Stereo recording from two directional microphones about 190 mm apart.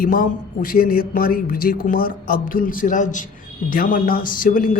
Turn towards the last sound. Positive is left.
turn(degrees=45)  # may be behind; listen again after turning